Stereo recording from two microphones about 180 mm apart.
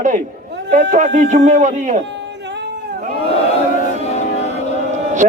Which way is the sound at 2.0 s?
75° right (ahead or behind).